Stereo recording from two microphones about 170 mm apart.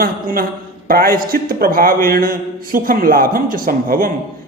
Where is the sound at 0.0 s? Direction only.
60° right (ahead or behind).